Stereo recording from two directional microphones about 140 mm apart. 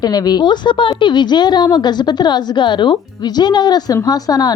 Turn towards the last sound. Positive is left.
turn(degrees=25)  # may be behind; listen again after turning